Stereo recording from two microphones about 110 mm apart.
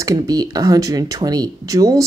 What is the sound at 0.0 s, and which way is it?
Speech, 35° right (ahead or behind).